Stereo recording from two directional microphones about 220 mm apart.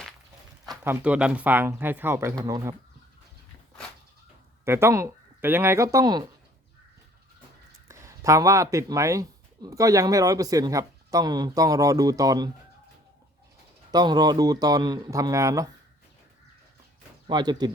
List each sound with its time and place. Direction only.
0.9 s speech: 5° right (ahead or behind)
4.6 s speech: 10° right (ahead or behind)
7.9 s speech: 15° right (ahead or behind)
13.9 s speech: 20° right (ahead or behind)
17.2 s speech: 20° right (ahead or behind)